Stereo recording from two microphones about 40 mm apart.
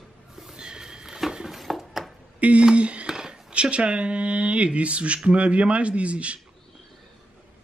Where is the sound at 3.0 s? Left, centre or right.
Centre.